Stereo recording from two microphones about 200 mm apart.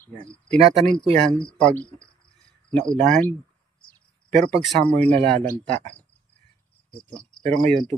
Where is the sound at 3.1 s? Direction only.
10° left (ahead or behind).